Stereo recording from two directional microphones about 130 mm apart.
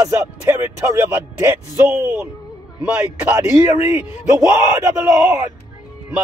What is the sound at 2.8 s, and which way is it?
A man's voice, 10° right (ahead or behind).